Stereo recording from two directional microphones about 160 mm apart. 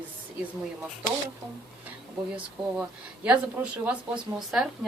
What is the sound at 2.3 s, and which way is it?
A woman's voice, 10° right (ahead or behind).